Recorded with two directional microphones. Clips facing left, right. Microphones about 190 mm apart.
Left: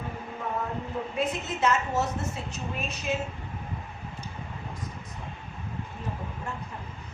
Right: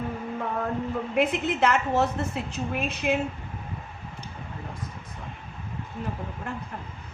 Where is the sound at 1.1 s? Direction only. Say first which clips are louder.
Right 7 dB; 60° right (ahead or behind).